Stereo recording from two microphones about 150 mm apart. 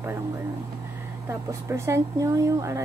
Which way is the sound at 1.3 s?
20° right (ahead or behind).